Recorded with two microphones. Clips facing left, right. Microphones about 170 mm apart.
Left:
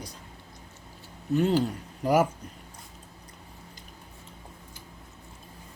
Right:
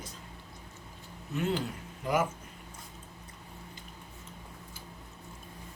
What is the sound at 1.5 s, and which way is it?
Speech, 40° left (ahead or behind).